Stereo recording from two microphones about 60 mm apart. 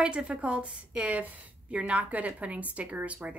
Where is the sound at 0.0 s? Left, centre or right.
Centre.